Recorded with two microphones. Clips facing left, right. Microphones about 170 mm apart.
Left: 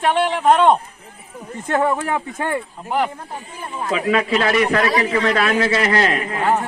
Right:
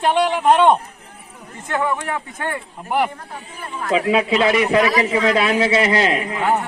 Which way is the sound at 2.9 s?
10° right (ahead or behind).